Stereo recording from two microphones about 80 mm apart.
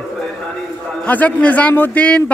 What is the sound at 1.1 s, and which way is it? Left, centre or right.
A man's voice, centre.